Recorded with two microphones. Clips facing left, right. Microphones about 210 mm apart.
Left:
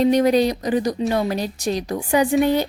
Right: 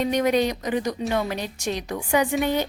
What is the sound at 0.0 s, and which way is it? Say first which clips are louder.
Speech: left 5 dB; 35° left (ahead or behind).